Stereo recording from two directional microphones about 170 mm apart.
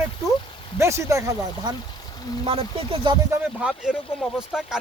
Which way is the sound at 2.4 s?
35° right (ahead or behind).